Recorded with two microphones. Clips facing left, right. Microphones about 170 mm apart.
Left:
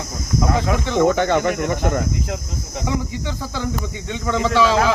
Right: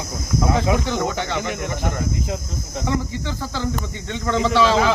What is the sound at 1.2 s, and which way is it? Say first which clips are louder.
Speech: left 7 dB; 55° left (ahead or behind).